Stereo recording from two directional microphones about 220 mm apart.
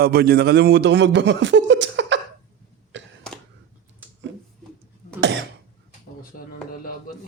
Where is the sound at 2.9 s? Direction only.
55° right (ahead or behind).